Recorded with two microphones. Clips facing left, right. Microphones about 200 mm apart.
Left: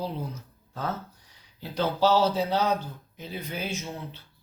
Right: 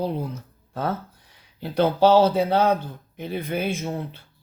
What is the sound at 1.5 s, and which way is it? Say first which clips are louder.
Speech: right 7 dB; 60° right (ahead or behind).